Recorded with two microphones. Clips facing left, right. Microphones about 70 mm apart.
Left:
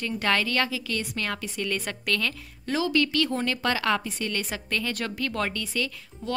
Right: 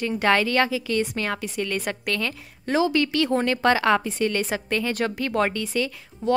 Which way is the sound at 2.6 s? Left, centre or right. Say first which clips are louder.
Right 3 dB; right.